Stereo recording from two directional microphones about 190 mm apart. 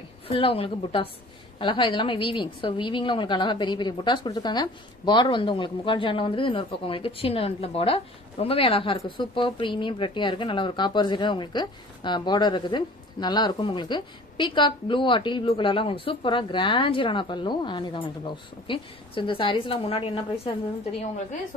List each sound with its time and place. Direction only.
0.3 s a woman's voice: 30° left (ahead or behind)